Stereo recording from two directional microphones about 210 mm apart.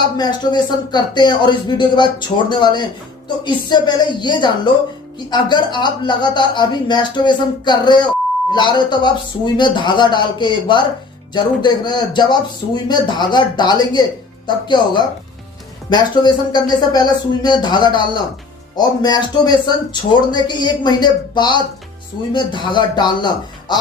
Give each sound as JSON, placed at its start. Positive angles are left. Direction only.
{"t": 0.0, "sound": "speech", "side_deg": 20}